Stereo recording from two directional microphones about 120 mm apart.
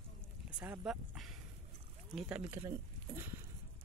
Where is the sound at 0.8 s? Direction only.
5° right (ahead or behind).